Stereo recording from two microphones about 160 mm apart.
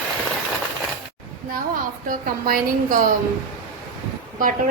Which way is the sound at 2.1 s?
60° right (ahead or behind).